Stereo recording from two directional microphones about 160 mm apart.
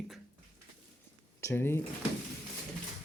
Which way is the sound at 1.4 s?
15° left (ahead or behind).